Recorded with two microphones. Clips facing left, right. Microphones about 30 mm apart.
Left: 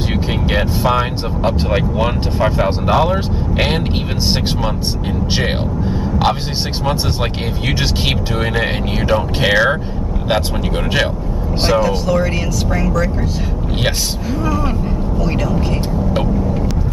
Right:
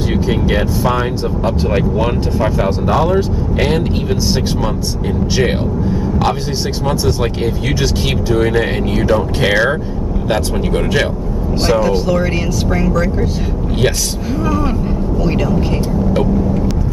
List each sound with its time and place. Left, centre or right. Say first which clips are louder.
0.1 s speech: right 3 dB; centre
5.9 s vehicle: left 1 dB; centre
8.5 s speech: right 3 dB; centre
11.8 s speech: right 1 dB; centre
15.2 s speech: right 3 dB; centre